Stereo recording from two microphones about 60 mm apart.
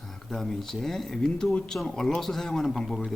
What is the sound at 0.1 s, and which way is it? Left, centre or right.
A man's voice, centre.